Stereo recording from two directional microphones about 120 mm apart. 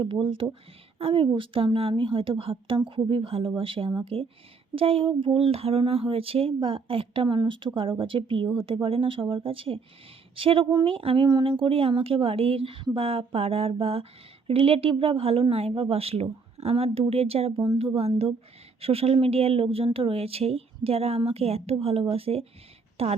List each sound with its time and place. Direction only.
0.0 s speech: 45° right (ahead or behind)